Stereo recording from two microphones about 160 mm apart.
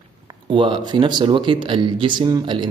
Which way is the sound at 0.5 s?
30° right (ahead or behind).